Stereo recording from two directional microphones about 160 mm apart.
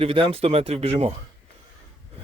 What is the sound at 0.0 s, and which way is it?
Speech, 35° right (ahead or behind).